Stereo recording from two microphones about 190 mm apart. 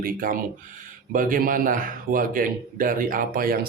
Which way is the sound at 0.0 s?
50° right (ahead or behind).